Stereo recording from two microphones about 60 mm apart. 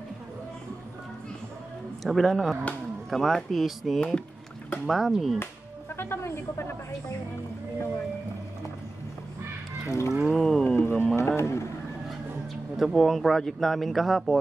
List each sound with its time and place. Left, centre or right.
2.0 s speech: centre
5.9 s a man's voice: left
9.8 s a sound: left
10.3 s speech: centre
10.8 s speech: left
11.3 s a man's voice: left
12.7 s speech: centre